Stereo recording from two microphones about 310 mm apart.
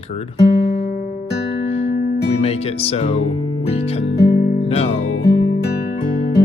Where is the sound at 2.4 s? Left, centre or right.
Centre.